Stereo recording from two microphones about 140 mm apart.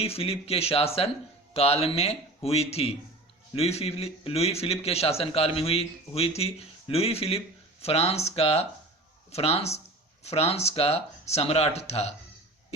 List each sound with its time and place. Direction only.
0.0 s speech: 45° left (ahead or behind)